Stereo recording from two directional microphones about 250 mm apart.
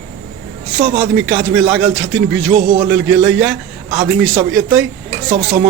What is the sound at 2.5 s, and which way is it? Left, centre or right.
Speech, right.